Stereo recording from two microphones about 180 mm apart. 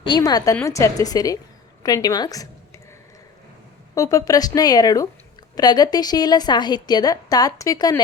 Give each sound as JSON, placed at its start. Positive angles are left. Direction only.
{"t": 0.0, "sound": "a woman's voice", "side_deg": 25}
{"t": 3.9, "sound": "a woman's voice", "side_deg": 20}